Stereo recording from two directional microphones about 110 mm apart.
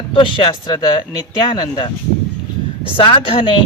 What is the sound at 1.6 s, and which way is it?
Speech, 50° left (ahead or behind).